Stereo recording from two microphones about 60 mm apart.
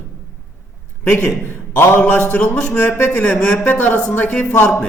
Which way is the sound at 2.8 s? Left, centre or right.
Left.